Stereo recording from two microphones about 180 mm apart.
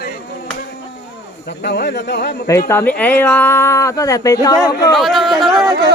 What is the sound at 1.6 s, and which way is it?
Speech, 70° left (ahead or behind).